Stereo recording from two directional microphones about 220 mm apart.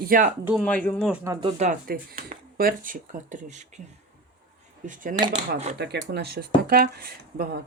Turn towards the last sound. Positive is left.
turn(degrees=-45)  # may be behind; listen again after turning